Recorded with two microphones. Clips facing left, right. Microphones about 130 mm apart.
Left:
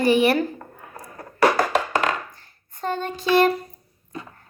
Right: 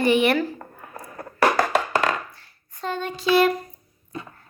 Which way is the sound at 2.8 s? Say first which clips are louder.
Left 1 dB; 45° left (ahead or behind).